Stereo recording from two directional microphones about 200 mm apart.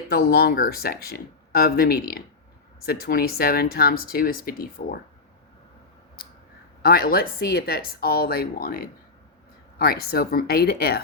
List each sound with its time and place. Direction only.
0.1 s speech: 50° left (ahead or behind)
6.2 s a sound: 50° left (ahead or behind)
6.8 s speech: 50° left (ahead or behind)